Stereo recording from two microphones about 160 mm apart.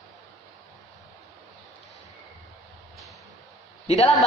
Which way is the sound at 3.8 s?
40° left (ahead or behind).